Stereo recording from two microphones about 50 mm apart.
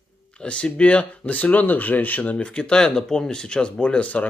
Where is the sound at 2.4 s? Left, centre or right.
Centre.